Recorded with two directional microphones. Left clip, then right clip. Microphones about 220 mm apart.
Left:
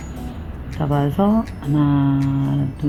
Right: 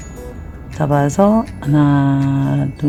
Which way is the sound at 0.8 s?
35° right (ahead or behind).